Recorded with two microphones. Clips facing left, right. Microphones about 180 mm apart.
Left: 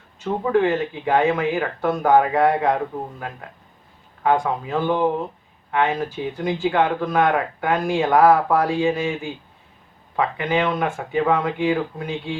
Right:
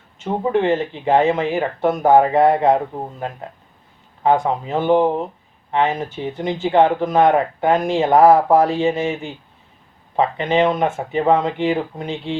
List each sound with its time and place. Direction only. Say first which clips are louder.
0.2 s speech: right 1 dB; 20° right (ahead or behind)
4.2 s speech: right 3 dB; 20° right (ahead or behind)